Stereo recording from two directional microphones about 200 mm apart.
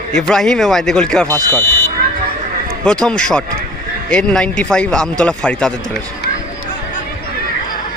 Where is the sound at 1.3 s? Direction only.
15° right (ahead or behind).